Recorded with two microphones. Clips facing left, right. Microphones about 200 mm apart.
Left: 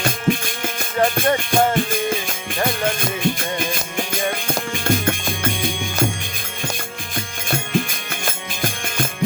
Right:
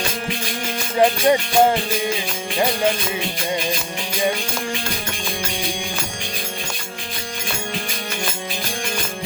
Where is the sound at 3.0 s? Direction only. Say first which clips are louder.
Left 3 dB; 50° left (ahead or behind).